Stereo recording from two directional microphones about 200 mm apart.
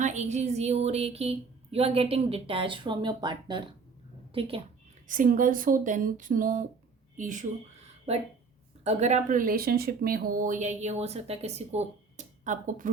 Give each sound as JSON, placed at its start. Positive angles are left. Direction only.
{"t": 0.0, "sound": "a woman's voice", "side_deg": -35}
{"t": 5.0, "sound": "speech", "side_deg": -40}